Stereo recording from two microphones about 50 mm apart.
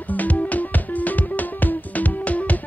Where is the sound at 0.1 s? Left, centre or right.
Left.